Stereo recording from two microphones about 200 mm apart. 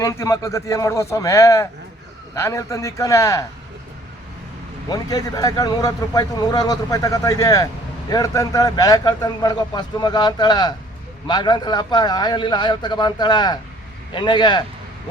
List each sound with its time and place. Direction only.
0.0 s speech: 15° left (ahead or behind)
4.9 s a man's voice: 20° left (ahead or behind)